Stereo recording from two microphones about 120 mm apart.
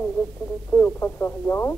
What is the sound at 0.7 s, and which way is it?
Speech, 10° left (ahead or behind).